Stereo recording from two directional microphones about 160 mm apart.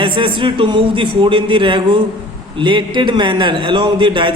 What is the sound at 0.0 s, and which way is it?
A man's voice, 30° right (ahead or behind).